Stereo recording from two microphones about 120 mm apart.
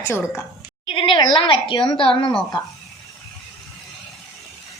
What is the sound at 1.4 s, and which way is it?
Speech, 45° left (ahead or behind).